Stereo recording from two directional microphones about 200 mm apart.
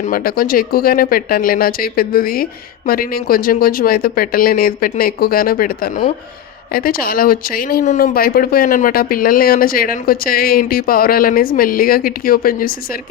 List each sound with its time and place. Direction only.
0.0 s speech: 45° left (ahead or behind)